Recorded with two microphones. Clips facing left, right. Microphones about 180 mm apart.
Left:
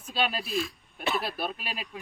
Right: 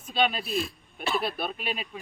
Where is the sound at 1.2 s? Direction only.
5° left (ahead or behind).